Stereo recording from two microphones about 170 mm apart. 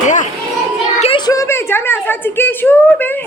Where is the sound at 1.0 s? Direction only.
30° left (ahead or behind).